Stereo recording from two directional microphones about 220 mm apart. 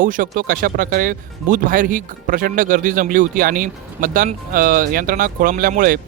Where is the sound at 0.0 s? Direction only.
35° right (ahead or behind).